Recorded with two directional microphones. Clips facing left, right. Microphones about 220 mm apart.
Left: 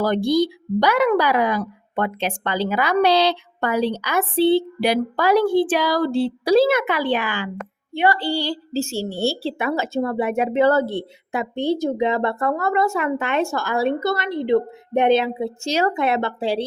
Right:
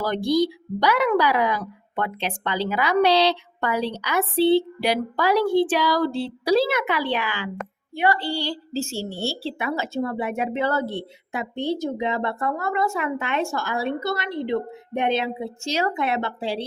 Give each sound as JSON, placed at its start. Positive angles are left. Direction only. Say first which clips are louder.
{"t": 0.0, "sound": "a woman's voice", "louder": "left 3 dB", "side_deg": 50}
{"t": 7.9, "sound": "a woman's voice", "louder": "left 3 dB", "side_deg": 30}